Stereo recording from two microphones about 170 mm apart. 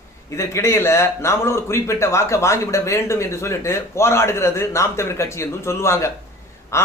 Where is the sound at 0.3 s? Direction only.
15° left (ahead or behind).